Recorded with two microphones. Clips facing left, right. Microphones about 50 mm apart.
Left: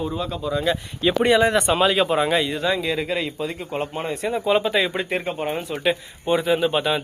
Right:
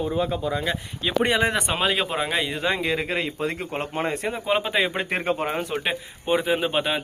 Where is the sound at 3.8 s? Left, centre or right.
Right.